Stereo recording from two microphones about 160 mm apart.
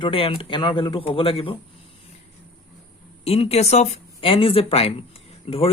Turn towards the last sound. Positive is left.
turn(degrees=35)  # may be behind; listen again after turning